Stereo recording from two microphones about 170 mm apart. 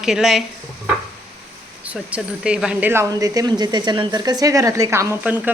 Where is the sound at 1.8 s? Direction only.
5° right (ahead or behind).